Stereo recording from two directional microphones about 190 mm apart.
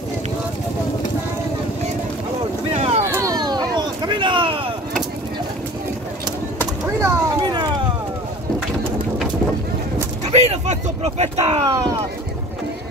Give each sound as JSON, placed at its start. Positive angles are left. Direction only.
{"t": 3.0, "sound": "a sound", "side_deg": -15}
{"t": 6.6, "sound": "vehicle", "side_deg": -20}
{"t": 10.2, "sound": "speech", "side_deg": -35}
{"t": 11.6, "sound": "speech", "side_deg": -20}